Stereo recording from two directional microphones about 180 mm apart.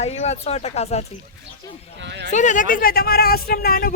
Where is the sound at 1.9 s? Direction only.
80° right.